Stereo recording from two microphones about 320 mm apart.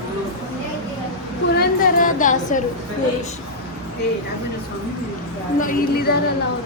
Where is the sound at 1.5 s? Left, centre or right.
Left.